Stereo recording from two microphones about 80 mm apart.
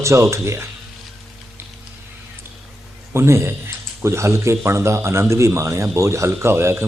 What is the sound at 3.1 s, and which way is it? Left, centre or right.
A man's voice, right.